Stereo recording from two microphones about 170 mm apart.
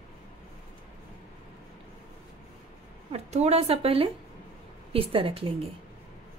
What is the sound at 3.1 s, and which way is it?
A woman's voice, 40° right (ahead or behind).